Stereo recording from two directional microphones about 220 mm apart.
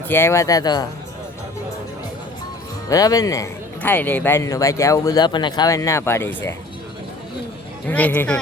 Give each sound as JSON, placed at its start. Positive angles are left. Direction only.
{"t": 0.1, "sound": "a man's voice", "side_deg": 10}
{"t": 2.9, "sound": "a man's voice", "side_deg": 15}
{"t": 7.9, "sound": "a man's voice", "side_deg": 5}